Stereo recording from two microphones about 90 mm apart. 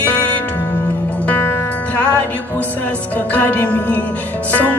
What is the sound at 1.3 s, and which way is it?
Music, 25° left (ahead or behind).